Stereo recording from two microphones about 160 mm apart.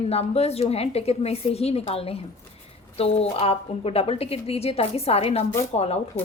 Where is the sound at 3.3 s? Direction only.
40° left (ahead or behind).